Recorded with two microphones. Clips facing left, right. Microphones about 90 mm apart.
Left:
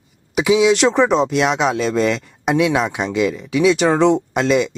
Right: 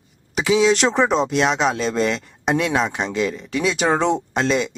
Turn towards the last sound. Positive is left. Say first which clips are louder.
# left 4 dB
turn(degrees=0)  # may be behind; listen again after turning